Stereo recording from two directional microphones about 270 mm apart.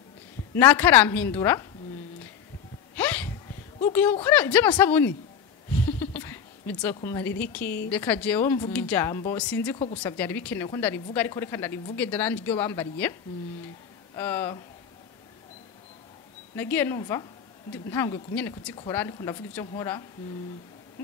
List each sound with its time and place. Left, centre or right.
0.6 s speech: centre
3.0 s a sound: centre
3.8 s speech: centre
5.7 s a sound: centre
7.5 s speech: centre
14.1 s speech: centre
16.5 s speech: centre